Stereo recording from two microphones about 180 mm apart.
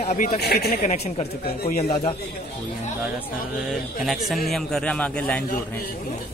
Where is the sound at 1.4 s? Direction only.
60° left (ahead or behind).